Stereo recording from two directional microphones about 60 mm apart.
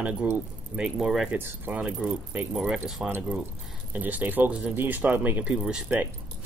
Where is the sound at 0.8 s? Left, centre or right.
Centre.